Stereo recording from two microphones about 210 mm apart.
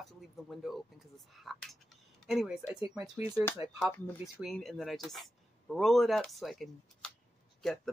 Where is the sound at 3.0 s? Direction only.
10° right (ahead or behind).